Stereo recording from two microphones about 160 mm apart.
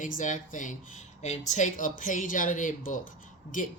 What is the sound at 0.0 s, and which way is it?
A woman's voice, 55° left (ahead or behind).